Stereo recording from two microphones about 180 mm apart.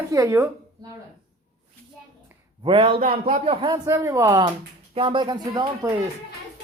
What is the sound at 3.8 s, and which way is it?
Speech, 15° right (ahead or behind).